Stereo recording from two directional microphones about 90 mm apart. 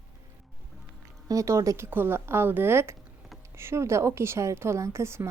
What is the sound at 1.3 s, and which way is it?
A woman's voice, 35° right (ahead or behind).